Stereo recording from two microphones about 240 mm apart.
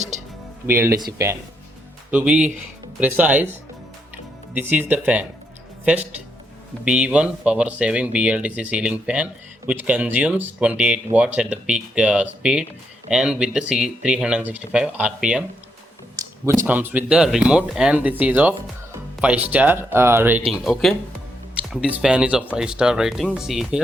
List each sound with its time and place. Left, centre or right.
0.1 s music: right
0.7 s speech: centre
16.6 s speech: centre